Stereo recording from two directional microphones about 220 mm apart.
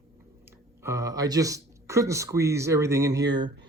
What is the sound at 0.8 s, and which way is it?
Speech, 15° right (ahead or behind).